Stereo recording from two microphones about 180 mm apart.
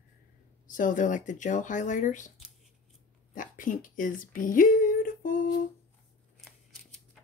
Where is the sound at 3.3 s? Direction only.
50° left (ahead or behind).